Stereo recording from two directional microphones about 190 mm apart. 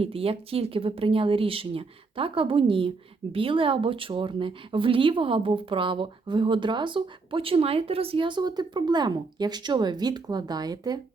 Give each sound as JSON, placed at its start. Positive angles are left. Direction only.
{"t": 0.0, "sound": "speech", "side_deg": -30}